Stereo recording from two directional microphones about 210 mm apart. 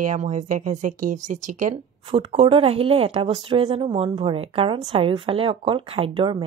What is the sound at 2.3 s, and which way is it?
Speech, 25° right (ahead or behind).